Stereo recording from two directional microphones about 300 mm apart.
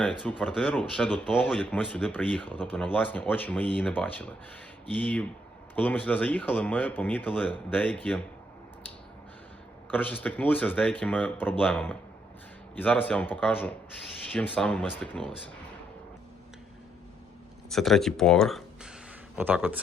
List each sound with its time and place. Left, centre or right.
0.0 s speech: centre
9.9 s speech: centre
17.7 s speech: centre